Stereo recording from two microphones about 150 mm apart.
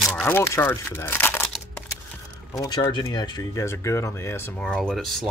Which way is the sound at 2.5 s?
25° left (ahead or behind).